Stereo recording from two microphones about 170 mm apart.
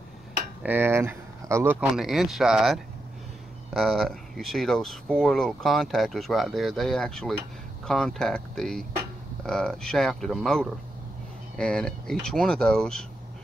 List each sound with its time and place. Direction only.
0.6 s speech: 10° right (ahead or behind); by 13.0 s 5° left (ahead or behind)